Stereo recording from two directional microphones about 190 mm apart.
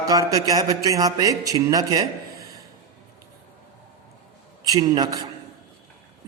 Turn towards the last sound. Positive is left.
turn(degrees=-20)  # may be behind; listen again after turning